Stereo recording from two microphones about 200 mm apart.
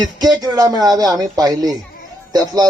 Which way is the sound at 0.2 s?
20° right (ahead or behind).